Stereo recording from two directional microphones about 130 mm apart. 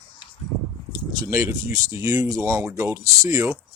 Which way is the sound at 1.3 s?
20° right (ahead or behind).